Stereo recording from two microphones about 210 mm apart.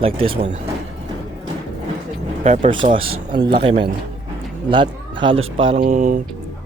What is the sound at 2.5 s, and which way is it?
Speech, 30° right (ahead or behind).